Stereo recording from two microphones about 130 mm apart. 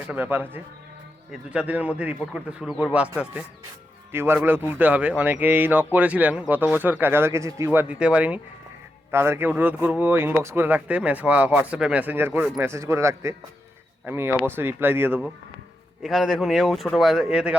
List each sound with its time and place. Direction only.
0.1 s speech: 15° right (ahead or behind)
4.1 s speech: 15° right (ahead or behind)
16.0 s speech: centre (ahead or behind)